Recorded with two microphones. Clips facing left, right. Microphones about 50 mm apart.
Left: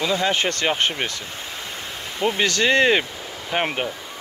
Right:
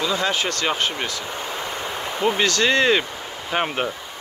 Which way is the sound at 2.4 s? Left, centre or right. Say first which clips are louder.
Left 2 dB; centre.